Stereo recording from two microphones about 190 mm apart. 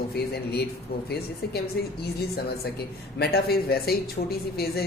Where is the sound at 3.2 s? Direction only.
55° left (ahead or behind).